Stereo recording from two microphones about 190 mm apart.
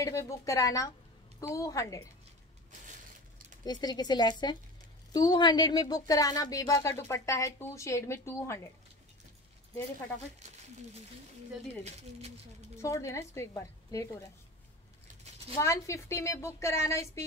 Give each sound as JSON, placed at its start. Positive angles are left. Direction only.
{"t": 0.0, "sound": "speech", "side_deg": 15}
{"t": 3.6, "sound": "speech", "side_deg": 20}
{"t": 10.4, "sound": "speech", "side_deg": -35}
{"t": 11.8, "sound": "speech", "side_deg": -35}
{"t": 12.7, "sound": "speech", "side_deg": 15}
{"t": 15.6, "sound": "speech", "side_deg": 15}